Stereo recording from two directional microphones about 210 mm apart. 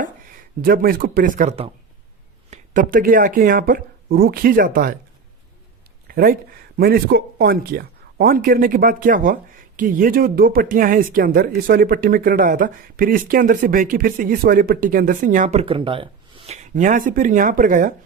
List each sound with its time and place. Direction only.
0.6 s speech: 45° right (ahead or behind)
2.5 s speech: 40° right (ahead or behind)
6.1 s a sound: 45° right (ahead or behind)
6.7 s a man's voice: 50° right (ahead or behind)